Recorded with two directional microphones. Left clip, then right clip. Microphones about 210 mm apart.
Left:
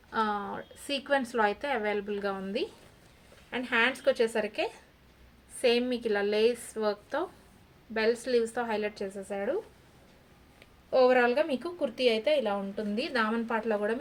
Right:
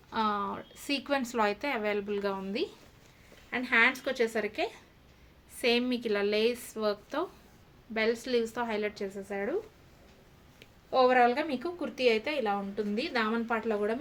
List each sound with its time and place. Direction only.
0.1 s a woman's voice: 20° right (ahead or behind)
10.9 s a woman's voice: 10° right (ahead or behind)